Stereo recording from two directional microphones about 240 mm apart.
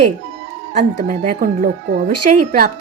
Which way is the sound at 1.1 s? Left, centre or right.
Right.